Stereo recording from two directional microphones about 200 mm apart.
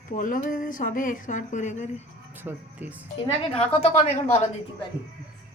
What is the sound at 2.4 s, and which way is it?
Speech, 10° right (ahead or behind).